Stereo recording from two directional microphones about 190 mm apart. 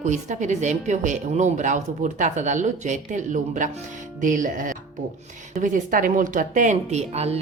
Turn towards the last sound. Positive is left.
turn(degrees=-35)  # may be behind; listen again after turning